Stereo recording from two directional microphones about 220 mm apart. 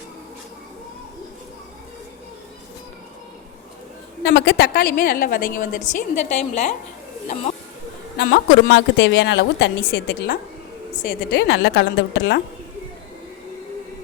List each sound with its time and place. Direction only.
4.2 s a woman's voice: 50° left (ahead or behind); by 6.7 s 30° left (ahead or behind)
8.2 s a woman's voice: 50° left (ahead or behind)